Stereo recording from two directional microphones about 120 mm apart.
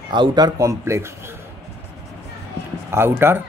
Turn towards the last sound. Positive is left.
turn(degrees=-20)  # may be behind; listen again after turning